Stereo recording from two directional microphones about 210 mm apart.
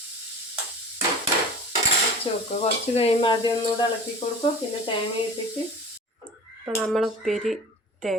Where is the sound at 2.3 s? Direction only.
25° left (ahead or behind).